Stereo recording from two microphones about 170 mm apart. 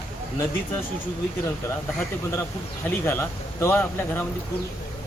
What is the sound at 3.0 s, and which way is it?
Speech, 15° left (ahead or behind).